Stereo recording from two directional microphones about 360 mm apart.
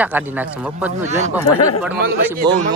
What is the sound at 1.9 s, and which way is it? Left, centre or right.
Speech, right.